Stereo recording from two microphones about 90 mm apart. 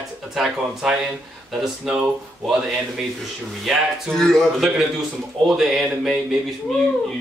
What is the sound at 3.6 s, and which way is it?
Speech, 5° left (ahead or behind).